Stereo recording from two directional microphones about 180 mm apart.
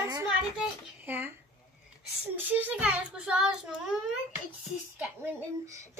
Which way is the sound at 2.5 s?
10° right (ahead or behind).